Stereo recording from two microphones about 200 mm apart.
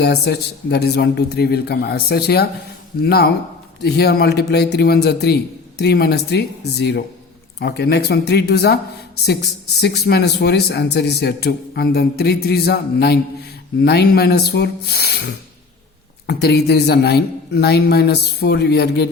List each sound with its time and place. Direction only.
0.0 s a man's voice: 55° left (ahead or behind)